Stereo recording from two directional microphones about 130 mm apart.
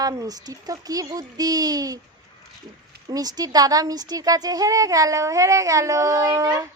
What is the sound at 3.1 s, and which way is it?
A woman's voice, 30° right (ahead or behind).